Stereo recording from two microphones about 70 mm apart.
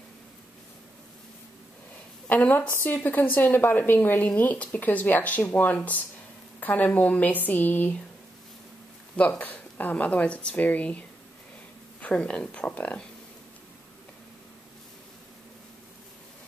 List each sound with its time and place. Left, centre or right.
2.2 s speech: left
9.1 s speech: left